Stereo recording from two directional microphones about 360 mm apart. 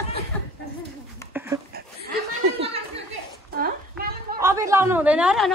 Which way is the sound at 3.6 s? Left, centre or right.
Right.